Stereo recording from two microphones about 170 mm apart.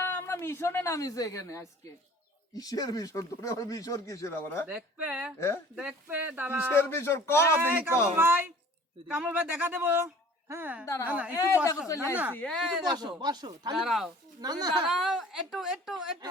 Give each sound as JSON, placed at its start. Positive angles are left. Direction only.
{"t": 0.0, "sound": "speech", "side_deg": 10}
{"t": 4.6, "sound": "a man's voice", "side_deg": -5}
{"t": 6.7, "sound": "speech", "side_deg": 15}
{"t": 7.6, "sound": "a man's voice", "side_deg": -15}
{"t": 11.3, "sound": "speech", "side_deg": 20}
{"t": 12.3, "sound": "a woman's voice", "side_deg": 5}
{"t": 12.9, "sound": "speech", "side_deg": -25}
{"t": 13.7, "sound": "a woman's voice", "side_deg": 0}
{"t": 14.4, "sound": "speech", "side_deg": -25}
{"t": 14.8, "sound": "a woman's voice", "side_deg": 0}